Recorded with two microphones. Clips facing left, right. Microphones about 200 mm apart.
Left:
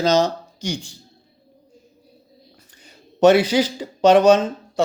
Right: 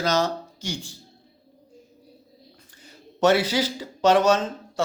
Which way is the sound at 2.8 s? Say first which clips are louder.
Left 6 dB; 15° left (ahead or behind).